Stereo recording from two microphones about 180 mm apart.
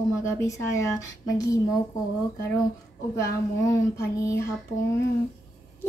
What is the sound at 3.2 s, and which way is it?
Speech, 20° left (ahead or behind).